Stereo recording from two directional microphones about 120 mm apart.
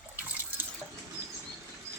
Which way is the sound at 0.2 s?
15° right (ahead or behind).